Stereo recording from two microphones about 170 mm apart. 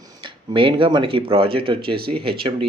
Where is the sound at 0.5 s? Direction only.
30° right (ahead or behind).